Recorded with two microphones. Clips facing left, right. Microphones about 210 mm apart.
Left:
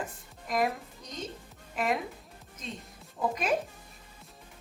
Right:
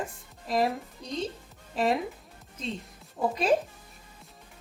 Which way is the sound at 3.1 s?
30° right (ahead or behind).